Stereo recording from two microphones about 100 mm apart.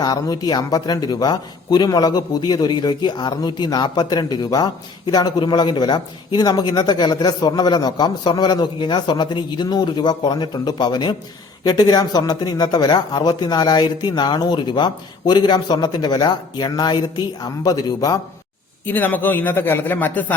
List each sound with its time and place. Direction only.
0.0 s speech: 40° left (ahead or behind)
18.9 s speech: 20° left (ahead or behind)